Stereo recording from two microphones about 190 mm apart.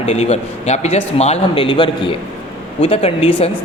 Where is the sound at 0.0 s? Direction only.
35° left (ahead or behind).